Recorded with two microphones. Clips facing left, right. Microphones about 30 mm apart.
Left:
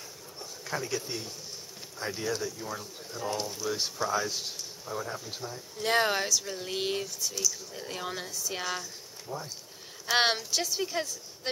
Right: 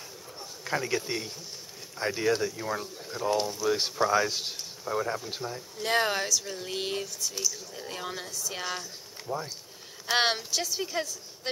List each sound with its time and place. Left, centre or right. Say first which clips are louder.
0.8 s speech: right 4 dB; right
3.2 s speech: right 6 dB; right
3.7 s speech: right 5 dB; right
5.8 s speech: even; centre
7.3 s speech: left 1 dB; centre
7.7 s speech: even; centre
9.3 s speech: right 5 dB; right
10.1 s speech: even; centre